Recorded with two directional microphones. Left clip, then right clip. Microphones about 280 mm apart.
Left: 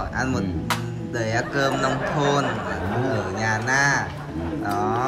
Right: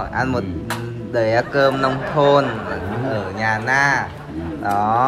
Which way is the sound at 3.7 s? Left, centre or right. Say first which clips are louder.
Right 3 dB; centre.